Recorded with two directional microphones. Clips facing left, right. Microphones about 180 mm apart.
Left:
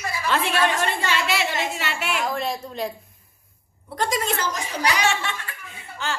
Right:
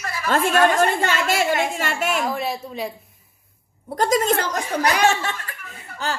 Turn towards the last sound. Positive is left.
turn(degrees=-40)  # may be behind; listen again after turning